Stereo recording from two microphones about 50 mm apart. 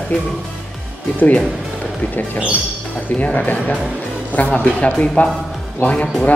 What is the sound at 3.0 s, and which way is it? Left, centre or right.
A man's voice, left.